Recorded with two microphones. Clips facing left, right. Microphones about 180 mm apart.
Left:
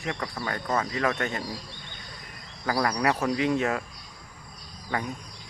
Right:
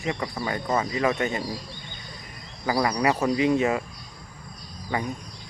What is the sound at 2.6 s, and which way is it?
Speech, 10° right (ahead or behind).